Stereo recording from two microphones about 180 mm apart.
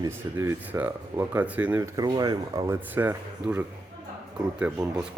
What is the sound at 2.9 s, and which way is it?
Speech, 10° right (ahead or behind).